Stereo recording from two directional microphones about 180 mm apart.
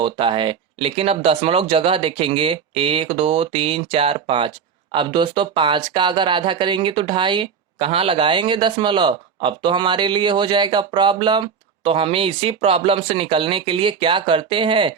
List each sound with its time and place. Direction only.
0.0 s speech: 30° right (ahead or behind)